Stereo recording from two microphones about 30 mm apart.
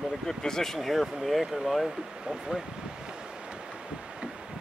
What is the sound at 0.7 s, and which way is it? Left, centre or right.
Speech, centre.